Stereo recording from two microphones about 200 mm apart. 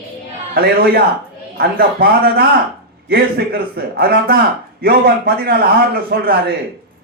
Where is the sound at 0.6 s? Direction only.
50° right (ahead or behind).